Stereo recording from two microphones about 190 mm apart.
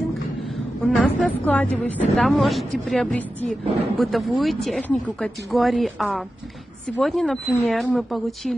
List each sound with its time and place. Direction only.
0.8 s a woman's voice: 5° left (ahead or behind)